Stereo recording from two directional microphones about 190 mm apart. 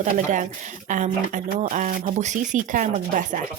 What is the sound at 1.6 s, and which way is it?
A woman's voice, 40° right (ahead or behind).